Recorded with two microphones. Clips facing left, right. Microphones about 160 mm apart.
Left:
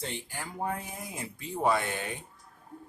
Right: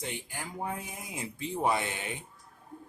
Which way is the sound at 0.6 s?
15° right (ahead or behind).